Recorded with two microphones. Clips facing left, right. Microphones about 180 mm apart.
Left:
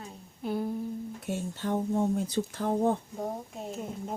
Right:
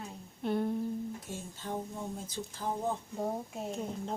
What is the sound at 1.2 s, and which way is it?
Speech, 70° left (ahead or behind).